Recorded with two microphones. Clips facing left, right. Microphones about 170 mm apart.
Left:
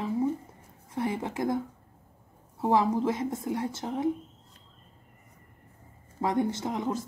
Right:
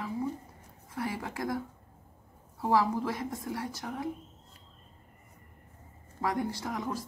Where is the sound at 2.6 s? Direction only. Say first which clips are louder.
Left 3 dB; 20° left (ahead or behind).